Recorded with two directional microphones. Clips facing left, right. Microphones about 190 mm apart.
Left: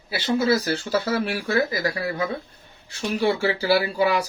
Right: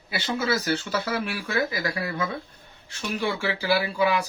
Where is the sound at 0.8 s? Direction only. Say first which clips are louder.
Left 4 dB; 35° left (ahead or behind).